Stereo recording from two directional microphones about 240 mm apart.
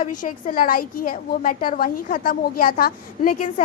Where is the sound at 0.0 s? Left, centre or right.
Left.